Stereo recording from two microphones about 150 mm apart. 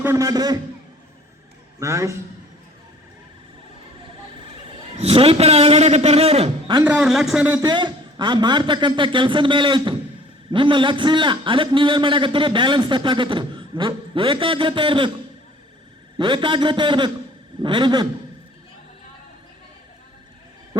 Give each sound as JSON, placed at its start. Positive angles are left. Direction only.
{"t": 0.0, "sound": "a man's voice", "side_deg": -20}
{"t": 1.8, "sound": "a man's voice", "side_deg": -20}
{"t": 4.9, "sound": "a man's voice", "side_deg": -40}
{"t": 6.8, "sound": "a man's voice", "side_deg": -5}
{"t": 7.6, "sound": "a man's voice", "side_deg": -30}
{"t": 16.1, "sound": "a man's voice", "side_deg": -30}